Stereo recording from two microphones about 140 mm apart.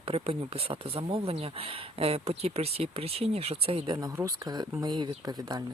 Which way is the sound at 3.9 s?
25° right (ahead or behind).